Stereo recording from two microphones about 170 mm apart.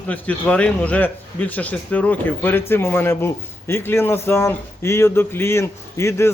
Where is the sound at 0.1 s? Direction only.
10° left (ahead or behind).